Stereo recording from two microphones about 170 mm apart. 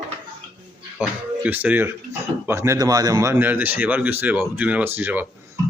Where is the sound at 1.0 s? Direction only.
10° right (ahead or behind).